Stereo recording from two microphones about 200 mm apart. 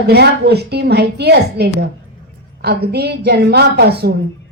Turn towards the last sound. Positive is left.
turn(degrees=-55)  # may be behind; listen again after turning